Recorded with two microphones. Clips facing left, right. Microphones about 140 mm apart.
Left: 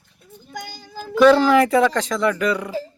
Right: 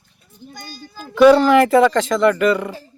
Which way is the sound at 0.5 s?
90° left.